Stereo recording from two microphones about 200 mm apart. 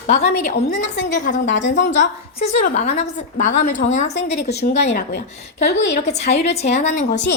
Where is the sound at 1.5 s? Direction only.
65° left (ahead or behind).